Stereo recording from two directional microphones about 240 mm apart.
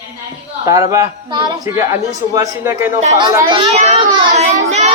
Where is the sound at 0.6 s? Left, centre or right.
Centre.